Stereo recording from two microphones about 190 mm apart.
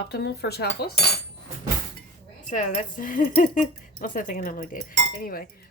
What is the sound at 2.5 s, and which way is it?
Speech, 40° left (ahead or behind).